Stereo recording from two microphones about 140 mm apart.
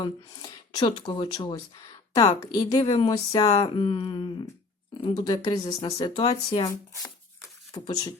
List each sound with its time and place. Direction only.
0.0 s a woman's voice: 30° left (ahead or behind)
6.7 s a woman's voice: 25° left (ahead or behind)